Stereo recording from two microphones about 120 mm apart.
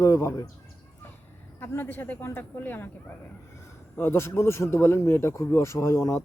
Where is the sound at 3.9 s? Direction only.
20° left (ahead or behind).